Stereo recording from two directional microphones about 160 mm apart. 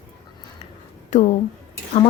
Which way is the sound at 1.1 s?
45° left (ahead or behind).